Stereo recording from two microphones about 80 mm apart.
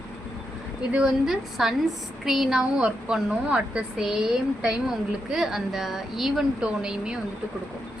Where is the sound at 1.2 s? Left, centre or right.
Centre.